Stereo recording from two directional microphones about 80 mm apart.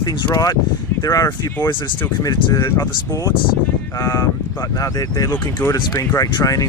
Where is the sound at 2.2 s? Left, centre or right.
Left.